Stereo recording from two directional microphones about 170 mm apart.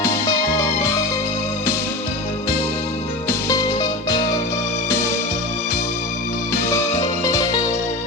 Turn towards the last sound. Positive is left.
turn(degrees=15)  # may be behind; listen again after turning